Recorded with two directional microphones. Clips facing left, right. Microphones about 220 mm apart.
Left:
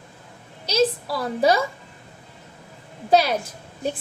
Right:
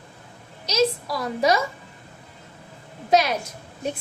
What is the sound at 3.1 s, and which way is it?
Speech, 30° left (ahead or behind).